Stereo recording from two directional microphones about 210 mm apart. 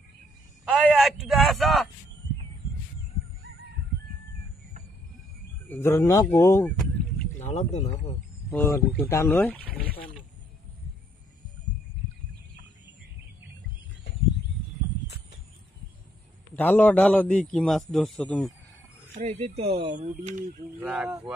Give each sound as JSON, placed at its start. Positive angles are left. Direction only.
{"t": 0.7, "sound": "speech", "side_deg": 0}
{"t": 5.7, "sound": "speech", "side_deg": 10}
{"t": 7.3, "sound": "speech", "side_deg": 35}
{"t": 8.5, "sound": "speech", "side_deg": 10}
{"t": 16.5, "sound": "speech", "side_deg": 10}
{"t": 19.1, "sound": "speech", "side_deg": -30}
{"t": 20.7, "sound": "speech", "side_deg": -5}